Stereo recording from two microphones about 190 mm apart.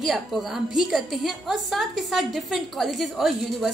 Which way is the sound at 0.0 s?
Centre (ahead or behind).